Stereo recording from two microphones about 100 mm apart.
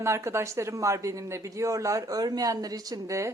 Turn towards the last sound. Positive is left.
turn(degrees=-30)  # may be behind; listen again after turning